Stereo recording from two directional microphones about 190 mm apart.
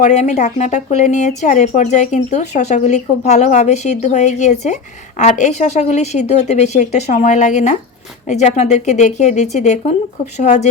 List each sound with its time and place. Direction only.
0.0 s speech: 40° left (ahead or behind)